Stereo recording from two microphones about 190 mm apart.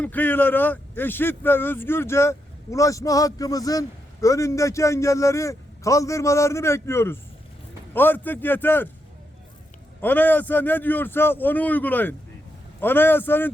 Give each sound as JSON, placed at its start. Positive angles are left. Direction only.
{"t": 0.0, "sound": "speech", "side_deg": 10}
{"t": 10.0, "sound": "speech", "side_deg": 10}